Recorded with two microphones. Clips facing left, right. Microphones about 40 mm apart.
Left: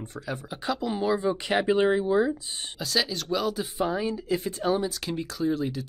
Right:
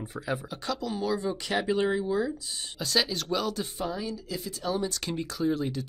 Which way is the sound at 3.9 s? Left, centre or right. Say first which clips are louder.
Left 7 dB; left.